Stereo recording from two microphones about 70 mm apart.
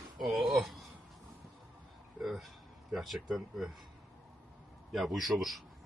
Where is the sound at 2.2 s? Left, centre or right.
Centre.